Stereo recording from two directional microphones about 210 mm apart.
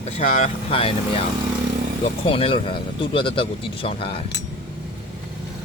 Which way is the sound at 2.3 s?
25° left (ahead or behind).